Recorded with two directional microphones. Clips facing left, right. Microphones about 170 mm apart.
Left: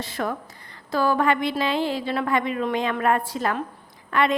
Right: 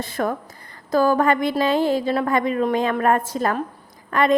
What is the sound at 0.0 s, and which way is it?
A woman's voice, 45° right (ahead or behind).